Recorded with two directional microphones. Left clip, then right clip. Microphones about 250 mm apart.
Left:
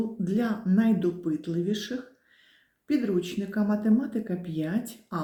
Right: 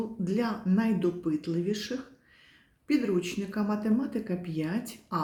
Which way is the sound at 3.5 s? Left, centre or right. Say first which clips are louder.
Left 4 dB; centre.